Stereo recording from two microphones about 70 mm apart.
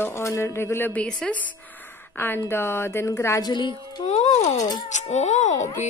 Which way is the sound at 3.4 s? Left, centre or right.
Left.